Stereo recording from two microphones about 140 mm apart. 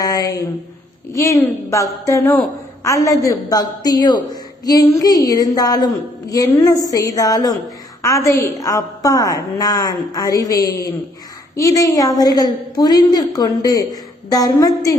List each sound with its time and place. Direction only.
0.0 s a woman's voice: 25° left (ahead or behind)